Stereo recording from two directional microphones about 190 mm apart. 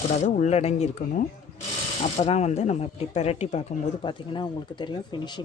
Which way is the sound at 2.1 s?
35° left (ahead or behind).